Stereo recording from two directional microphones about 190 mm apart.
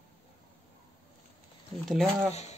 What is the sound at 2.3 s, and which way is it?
Speech, 35° left (ahead or behind).